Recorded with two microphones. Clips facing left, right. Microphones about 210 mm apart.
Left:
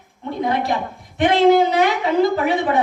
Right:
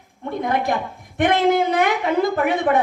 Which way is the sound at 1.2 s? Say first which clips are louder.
Left 4 dB; 55° right (ahead or behind).